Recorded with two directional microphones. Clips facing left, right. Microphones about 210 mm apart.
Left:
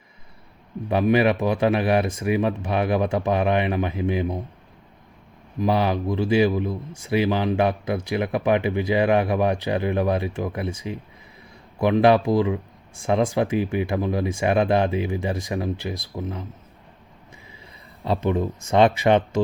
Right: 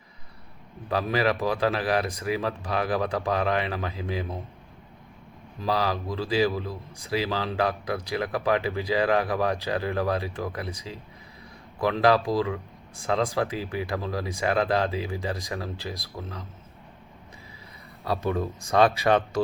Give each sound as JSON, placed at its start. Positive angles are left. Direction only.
{"t": 0.9, "sound": "speech", "side_deg": 20}
{"t": 5.5, "sound": "speech", "side_deg": 20}
{"t": 18.0, "sound": "speech", "side_deg": 15}